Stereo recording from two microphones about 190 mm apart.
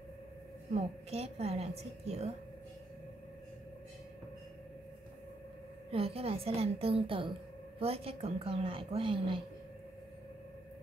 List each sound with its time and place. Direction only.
1.1 s a woman's voice: 35° right (ahead or behind)
5.9 s a woman's voice: 30° right (ahead or behind)